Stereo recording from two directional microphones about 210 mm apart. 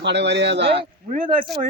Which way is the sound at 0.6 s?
25° right (ahead or behind).